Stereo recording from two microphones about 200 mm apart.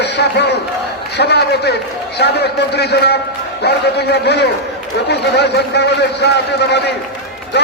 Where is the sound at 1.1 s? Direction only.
55° left (ahead or behind).